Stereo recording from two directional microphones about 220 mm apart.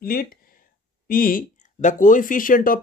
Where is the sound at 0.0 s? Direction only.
40° left (ahead or behind).